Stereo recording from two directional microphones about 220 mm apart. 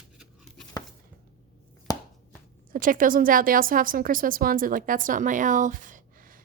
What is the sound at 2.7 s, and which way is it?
Speech, 40° right (ahead or behind).